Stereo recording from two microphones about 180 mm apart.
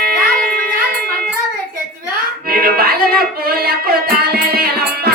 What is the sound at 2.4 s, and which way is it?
Music, 55° right (ahead or behind).